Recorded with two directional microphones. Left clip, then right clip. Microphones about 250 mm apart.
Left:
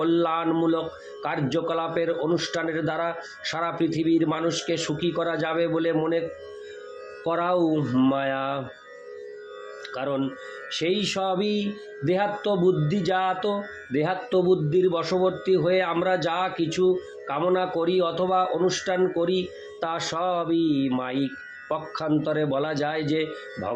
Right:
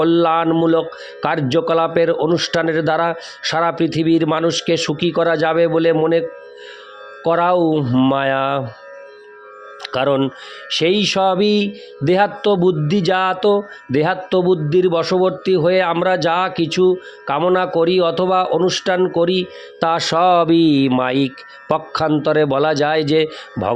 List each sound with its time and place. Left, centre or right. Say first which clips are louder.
0.0 s speech: right 9 dB; right
7.3 s speech: right 9 dB; right
9.8 s speech: right 12 dB; right
10.7 s music: right 10 dB; right